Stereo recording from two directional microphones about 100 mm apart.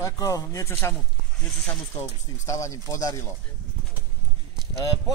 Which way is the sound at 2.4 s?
35° left (ahead or behind).